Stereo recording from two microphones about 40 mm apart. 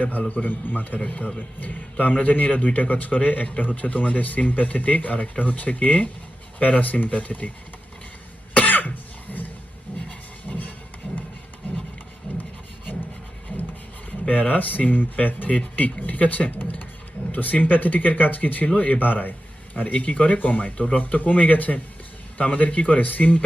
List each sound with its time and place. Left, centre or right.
0.0 s speech: left
8.5 s cough: left
10.5 s music: left
12.4 s a sound: left
14.3 s speech: left
20.0 s speech: left